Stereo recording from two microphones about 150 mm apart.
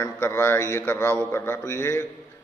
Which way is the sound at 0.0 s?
15° left (ahead or behind).